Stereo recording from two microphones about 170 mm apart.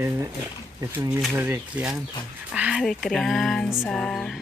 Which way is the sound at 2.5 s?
5° right (ahead or behind).